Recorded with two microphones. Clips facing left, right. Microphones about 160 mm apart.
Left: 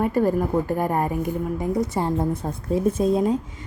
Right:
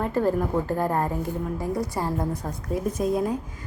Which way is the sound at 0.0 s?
10° left (ahead or behind).